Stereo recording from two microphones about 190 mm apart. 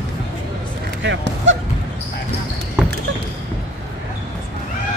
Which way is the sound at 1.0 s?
70° right (ahead or behind).